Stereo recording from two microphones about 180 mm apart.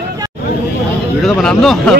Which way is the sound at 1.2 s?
Centre (ahead or behind).